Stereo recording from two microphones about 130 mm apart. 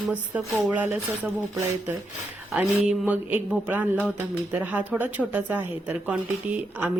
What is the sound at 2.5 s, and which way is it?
A woman's voice, 5° right (ahead or behind).